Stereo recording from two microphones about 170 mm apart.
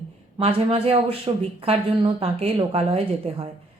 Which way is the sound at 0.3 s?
35° right (ahead or behind).